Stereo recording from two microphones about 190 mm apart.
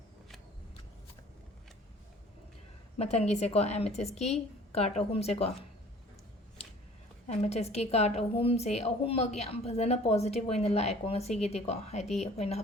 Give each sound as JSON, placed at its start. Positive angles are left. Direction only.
{"t": 3.0, "sound": "a woman's voice", "side_deg": 35}
{"t": 7.3, "sound": "a woman's voice", "side_deg": 35}